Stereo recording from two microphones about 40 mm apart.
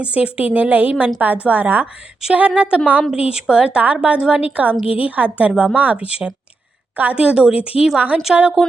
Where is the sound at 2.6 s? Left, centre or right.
Right.